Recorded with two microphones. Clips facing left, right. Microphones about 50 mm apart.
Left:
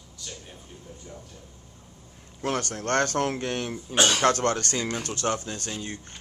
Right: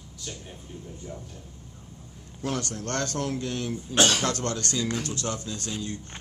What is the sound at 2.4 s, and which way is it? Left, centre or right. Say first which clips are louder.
Speech: left 2 dB; left.